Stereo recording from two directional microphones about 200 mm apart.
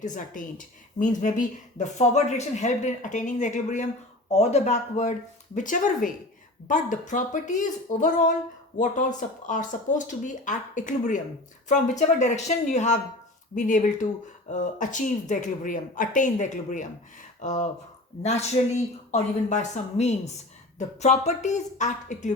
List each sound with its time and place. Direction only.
0.0 s a woman's voice: 40° left (ahead or behind)